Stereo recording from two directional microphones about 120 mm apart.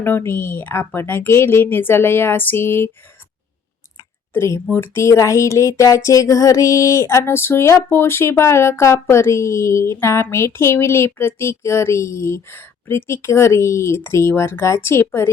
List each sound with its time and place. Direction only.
0.0 s speech: 20° left (ahead or behind)
4.4 s speech: 20° left (ahead or behind)